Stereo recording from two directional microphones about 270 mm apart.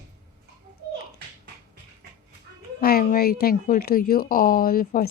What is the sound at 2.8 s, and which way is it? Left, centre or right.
Speech, left.